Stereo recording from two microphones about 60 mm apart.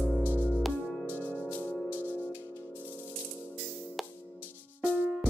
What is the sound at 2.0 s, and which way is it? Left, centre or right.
Music, left.